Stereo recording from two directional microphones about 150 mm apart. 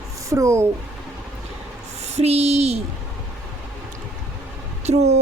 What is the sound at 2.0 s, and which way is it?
Speech, 45° right (ahead or behind).